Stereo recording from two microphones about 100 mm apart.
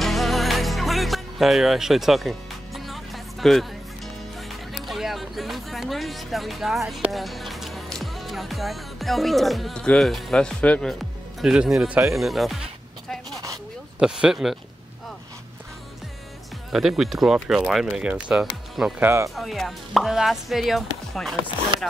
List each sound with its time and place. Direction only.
0.0 s music: centre (ahead or behind)
4.5 s speech: centre (ahead or behind)
11.4 s speech: 5° right (ahead or behind)
13.9 s speech: 10° right (ahead or behind)
16.7 s speech: centre (ahead or behind)
18.9 s speech: 25° right (ahead or behind)
19.3 s speech: centre (ahead or behind)